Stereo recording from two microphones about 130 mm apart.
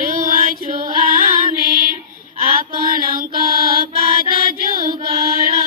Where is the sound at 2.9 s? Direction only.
90° right.